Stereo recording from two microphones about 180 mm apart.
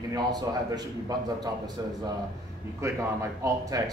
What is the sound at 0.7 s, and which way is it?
A man's voice, 20° right (ahead or behind).